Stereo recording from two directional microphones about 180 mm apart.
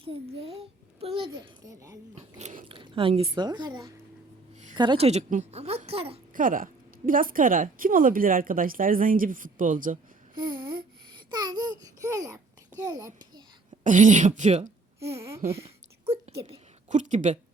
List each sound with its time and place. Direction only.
0.3 s a sound: 35° right (ahead or behind)
0.9 s a child's voice: 30° right (ahead or behind)
2.1 s speech: 45° right (ahead or behind)
2.6 s a child's voice: 30° right (ahead or behind)
6.3 s a woman's voice: 50° right (ahead or behind)
10.4 s a sound: 25° right (ahead or behind)
11.1 s babbling: 25° right (ahead or behind)
13.8 s a woman's voice: 45° right (ahead or behind)
15.4 s a sound: 30° right (ahead or behind)
16.9 s a woman's voice: 45° right (ahead or behind)